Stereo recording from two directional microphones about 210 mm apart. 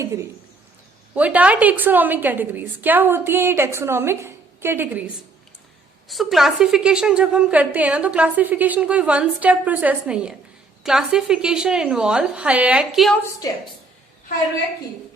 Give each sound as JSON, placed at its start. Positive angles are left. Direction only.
{"t": 0.0, "sound": "a woman's voice", "side_deg": -15}
{"t": 6.1, "sound": "a woman's voice", "side_deg": 0}
{"t": 13.4, "sound": "a woman's voice", "side_deg": 15}